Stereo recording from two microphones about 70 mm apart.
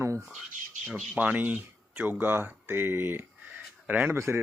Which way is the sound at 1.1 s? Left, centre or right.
Right.